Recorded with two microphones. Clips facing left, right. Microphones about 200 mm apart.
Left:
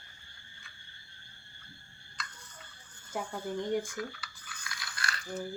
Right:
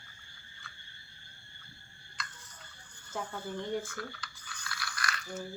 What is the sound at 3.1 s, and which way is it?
Speech, 15° left (ahead or behind).